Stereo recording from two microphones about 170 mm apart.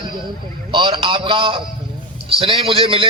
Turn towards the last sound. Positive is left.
turn(degrees=-30)  # may be behind; listen again after turning